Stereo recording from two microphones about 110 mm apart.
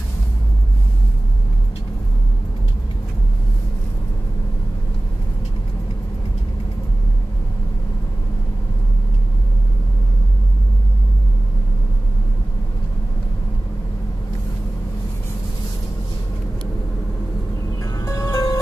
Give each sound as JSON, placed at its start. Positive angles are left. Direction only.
{"t": 17.8, "sound": "music", "side_deg": 30}